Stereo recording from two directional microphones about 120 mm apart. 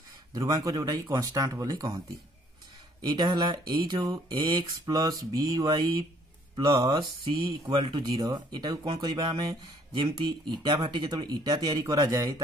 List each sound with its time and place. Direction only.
0.3 s speech: 30° right (ahead or behind)
3.0 s speech: 40° right (ahead or behind)
7.0 s speech: 40° right (ahead or behind)